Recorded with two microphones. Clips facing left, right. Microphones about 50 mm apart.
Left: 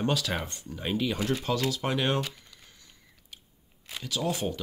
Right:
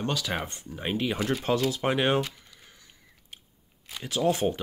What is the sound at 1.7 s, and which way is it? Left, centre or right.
Speech, right.